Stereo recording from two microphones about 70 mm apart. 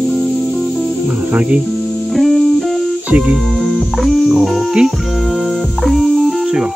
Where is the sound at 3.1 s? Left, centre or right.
Centre.